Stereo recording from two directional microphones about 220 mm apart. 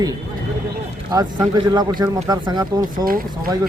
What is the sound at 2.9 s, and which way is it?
Speech, 40° right (ahead or behind).